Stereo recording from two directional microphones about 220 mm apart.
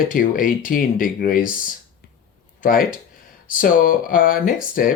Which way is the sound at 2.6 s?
40° left (ahead or behind).